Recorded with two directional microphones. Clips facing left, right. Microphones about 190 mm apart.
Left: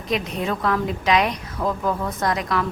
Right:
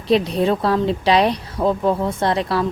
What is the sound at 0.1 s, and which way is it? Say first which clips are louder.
A woman's voice: right 8 dB; 35° right (ahead or behind).